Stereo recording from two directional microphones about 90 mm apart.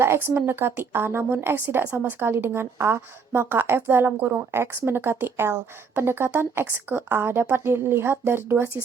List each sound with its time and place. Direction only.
0.0 s a woman's voice: 25° right (ahead or behind)